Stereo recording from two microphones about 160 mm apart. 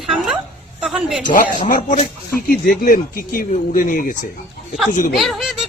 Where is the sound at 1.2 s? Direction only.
55° left (ahead or behind).